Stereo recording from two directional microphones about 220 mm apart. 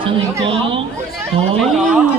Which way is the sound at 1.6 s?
Centre (ahead or behind).